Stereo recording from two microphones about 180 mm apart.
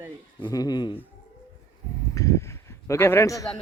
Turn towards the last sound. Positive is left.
turn(degrees=20)  # may be behind; listen again after turning